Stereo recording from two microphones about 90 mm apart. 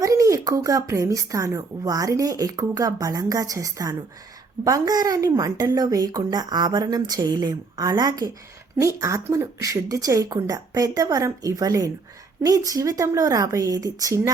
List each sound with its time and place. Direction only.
0.0 s a woman's voice: 40° right (ahead or behind)
8.8 s a woman's voice: 35° right (ahead or behind)